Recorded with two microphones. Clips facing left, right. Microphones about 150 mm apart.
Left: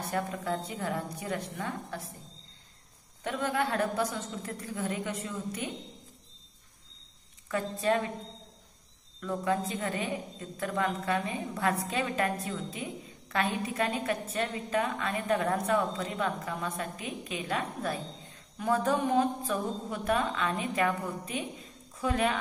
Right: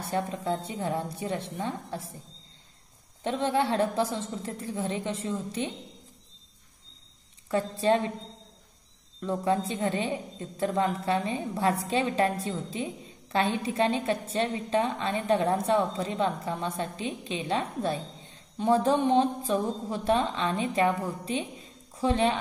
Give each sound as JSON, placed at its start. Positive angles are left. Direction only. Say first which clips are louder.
{"t": 0.1, "sound": "a woman's voice", "louder": "right 4 dB", "side_deg": -25}
{"t": 3.3, "sound": "a woman's voice", "louder": "right 4 dB", "side_deg": -25}
{"t": 7.4, "sound": "a woman's voice", "louder": "right 4 dB", "side_deg": -30}
{"t": 9.2, "sound": "a woman's voice", "louder": "right 3 dB", "side_deg": -30}